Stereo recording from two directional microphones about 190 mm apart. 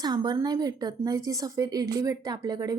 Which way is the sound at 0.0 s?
20° right (ahead or behind).